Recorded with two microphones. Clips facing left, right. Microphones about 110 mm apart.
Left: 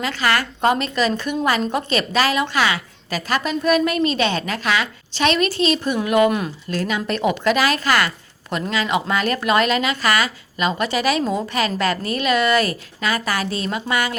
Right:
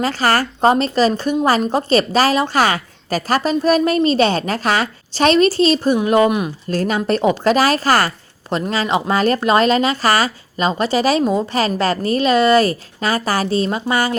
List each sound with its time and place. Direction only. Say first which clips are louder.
0.0 s a woman's voice: right 4 dB; 40° right (ahead or behind)